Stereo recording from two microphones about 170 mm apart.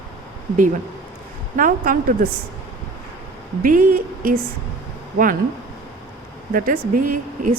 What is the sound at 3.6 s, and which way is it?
Speech, 50° right (ahead or behind).